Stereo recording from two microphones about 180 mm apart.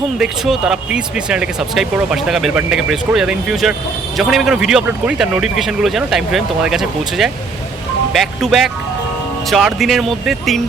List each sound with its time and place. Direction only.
0.2 s speech: centre (ahead or behind)